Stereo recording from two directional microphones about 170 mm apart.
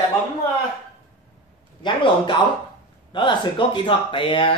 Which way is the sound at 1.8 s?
25° left (ahead or behind).